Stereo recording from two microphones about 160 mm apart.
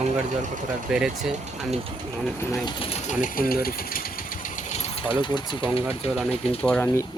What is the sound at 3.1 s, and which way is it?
Speech, 60° left (ahead or behind).